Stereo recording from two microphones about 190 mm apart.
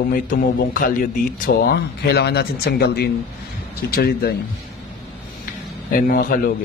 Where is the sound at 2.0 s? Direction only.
60° left (ahead or behind).